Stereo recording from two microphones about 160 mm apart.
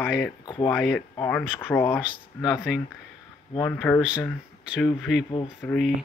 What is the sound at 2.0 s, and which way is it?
Speech, 5° right (ahead or behind).